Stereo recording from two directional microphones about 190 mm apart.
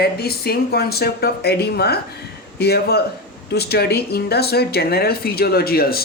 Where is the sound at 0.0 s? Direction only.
55° left (ahead or behind).